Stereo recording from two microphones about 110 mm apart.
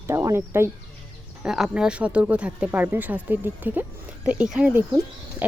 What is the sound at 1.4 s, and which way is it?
Speech, 5° right (ahead or behind).